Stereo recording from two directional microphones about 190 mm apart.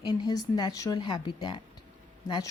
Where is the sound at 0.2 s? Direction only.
20° left (ahead or behind).